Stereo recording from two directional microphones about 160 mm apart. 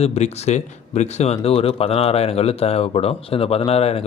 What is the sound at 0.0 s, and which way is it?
Speech, 40° left (ahead or behind).